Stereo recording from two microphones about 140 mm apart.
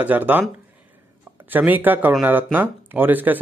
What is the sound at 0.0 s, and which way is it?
Speech, 10° right (ahead or behind).